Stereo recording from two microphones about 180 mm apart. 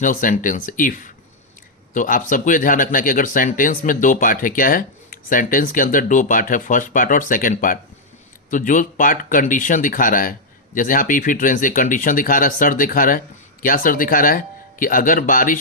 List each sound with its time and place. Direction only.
0.0 s speech: 50° left (ahead or behind)